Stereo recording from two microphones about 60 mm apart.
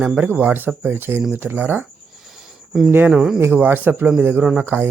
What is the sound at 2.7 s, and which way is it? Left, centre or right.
Speech, centre.